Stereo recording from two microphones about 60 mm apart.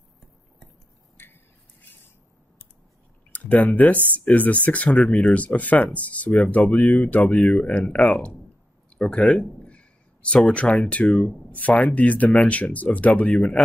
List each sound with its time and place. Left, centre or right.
1.1 s a sound: left
3.3 s speech: left
7.8 s speech: centre
9.1 s speech: left